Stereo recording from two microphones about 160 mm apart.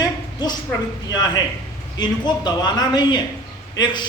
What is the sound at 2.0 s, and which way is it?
A man's voice, 25° left (ahead or behind).